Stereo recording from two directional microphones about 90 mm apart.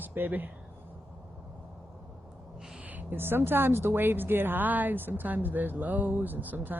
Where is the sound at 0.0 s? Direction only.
20° right (ahead or behind).